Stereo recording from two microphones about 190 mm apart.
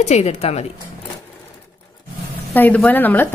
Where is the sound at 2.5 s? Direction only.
10° left (ahead or behind).